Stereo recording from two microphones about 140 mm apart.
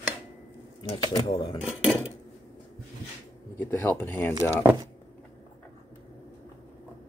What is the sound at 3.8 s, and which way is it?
Speech, 15° left (ahead or behind).